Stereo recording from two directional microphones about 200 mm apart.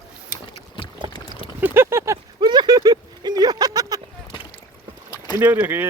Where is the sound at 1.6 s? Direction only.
10° right (ahead or behind).